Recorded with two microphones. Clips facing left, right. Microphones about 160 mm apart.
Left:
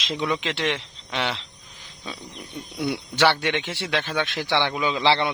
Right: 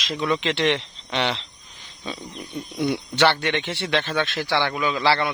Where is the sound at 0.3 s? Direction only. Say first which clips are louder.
Right 5 dB; 5° left (ahead or behind).